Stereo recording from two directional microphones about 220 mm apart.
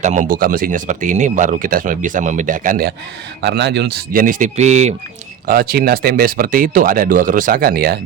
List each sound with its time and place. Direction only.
0.0 s speech: 35° right (ahead or behind)
3.4 s speech: 50° right (ahead or behind); by 4.9 s 30° right (ahead or behind)
5.5 s speech: 45° right (ahead or behind)